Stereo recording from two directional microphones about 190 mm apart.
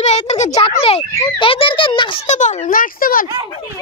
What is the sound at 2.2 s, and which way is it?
A child's voice, 40° left (ahead or behind).